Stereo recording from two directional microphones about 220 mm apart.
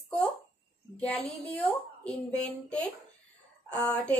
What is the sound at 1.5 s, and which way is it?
Speech, 5° left (ahead or behind).